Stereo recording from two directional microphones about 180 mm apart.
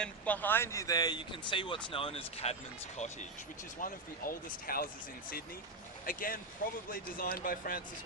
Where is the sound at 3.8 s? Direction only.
50° left (ahead or behind).